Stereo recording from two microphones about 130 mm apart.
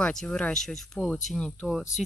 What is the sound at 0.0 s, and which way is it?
Speech, 5° left (ahead or behind).